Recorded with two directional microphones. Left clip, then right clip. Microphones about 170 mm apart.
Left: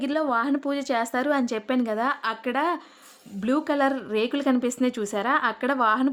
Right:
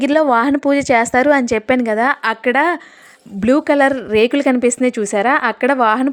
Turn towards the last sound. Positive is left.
turn(degrees=-30)  # may be behind; listen again after turning